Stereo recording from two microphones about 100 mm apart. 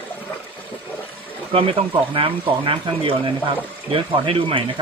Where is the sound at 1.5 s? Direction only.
70° right (ahead or behind).